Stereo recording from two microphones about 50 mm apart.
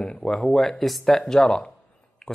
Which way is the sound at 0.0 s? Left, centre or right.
Centre.